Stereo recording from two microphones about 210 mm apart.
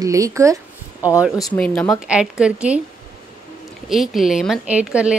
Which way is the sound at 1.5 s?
5° left (ahead or behind).